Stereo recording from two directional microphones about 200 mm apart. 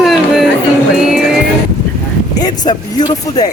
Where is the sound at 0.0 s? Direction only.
Centre (ahead or behind).